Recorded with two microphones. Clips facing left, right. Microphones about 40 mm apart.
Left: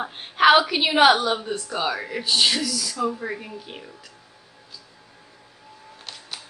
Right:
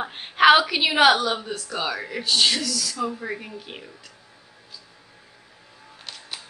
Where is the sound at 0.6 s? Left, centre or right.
Centre.